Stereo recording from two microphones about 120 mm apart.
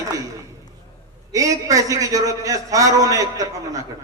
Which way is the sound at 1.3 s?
30° right (ahead or behind).